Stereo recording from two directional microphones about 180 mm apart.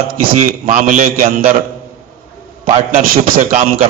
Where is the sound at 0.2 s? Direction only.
45° right (ahead or behind).